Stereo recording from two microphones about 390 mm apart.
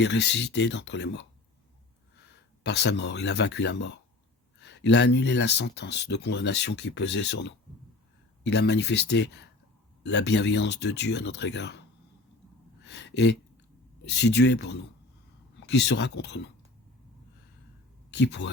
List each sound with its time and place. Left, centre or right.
0.0 s speech: left
2.6 s speech: left
12.8 s a sound: left
14.1 s speech: left
18.1 s speech: left